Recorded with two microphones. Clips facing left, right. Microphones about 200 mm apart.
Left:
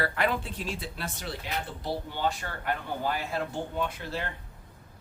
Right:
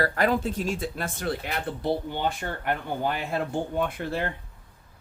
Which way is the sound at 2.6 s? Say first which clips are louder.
Right 3 dB; 55° right (ahead or behind).